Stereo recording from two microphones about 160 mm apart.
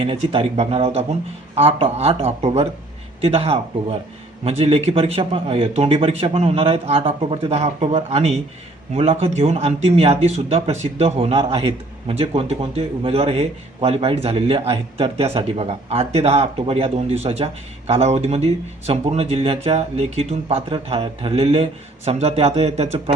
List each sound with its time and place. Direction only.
0.0 s a man's voice: 35° right (ahead or behind)